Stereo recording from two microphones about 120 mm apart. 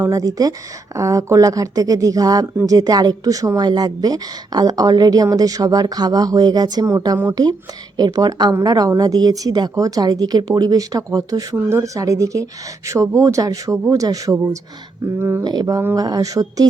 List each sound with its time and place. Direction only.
0.0 s a woman's voice: 30° right (ahead or behind)
15.4 s a woman's voice: 30° right (ahead or behind)